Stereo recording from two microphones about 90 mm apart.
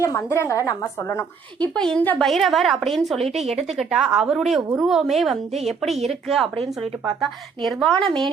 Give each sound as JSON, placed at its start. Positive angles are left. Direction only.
{"t": 0.0, "sound": "a woman's voice", "side_deg": 35}
{"t": 1.6, "sound": "a woman's voice", "side_deg": 10}